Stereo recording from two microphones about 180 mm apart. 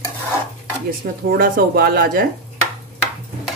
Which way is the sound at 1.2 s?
55° right (ahead or behind).